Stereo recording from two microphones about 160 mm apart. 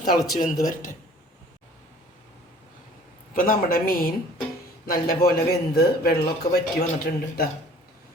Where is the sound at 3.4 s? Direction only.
60° left (ahead or behind).